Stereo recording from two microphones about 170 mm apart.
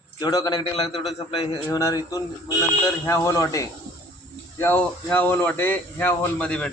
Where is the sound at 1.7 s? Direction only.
20° left (ahead or behind).